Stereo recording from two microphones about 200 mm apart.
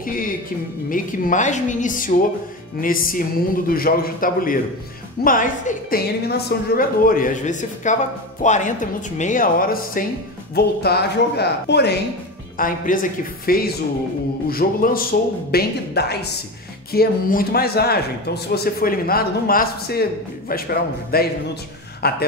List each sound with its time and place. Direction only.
0.8 s a woman's voice: 45° left (ahead or behind)
12.5 s a man's voice: 45° left (ahead or behind)